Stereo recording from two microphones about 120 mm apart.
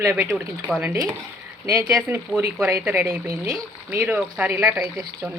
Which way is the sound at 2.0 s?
15° right (ahead or behind).